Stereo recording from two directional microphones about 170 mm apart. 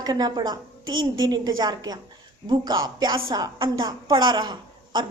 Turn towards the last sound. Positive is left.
turn(degrees=-25)  # may be behind; listen again after turning